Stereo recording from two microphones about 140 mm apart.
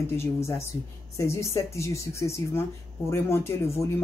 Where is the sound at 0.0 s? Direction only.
20° left (ahead or behind).